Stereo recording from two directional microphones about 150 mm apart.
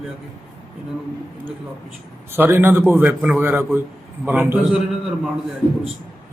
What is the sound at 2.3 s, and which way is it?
A man's voice, 15° right (ahead or behind).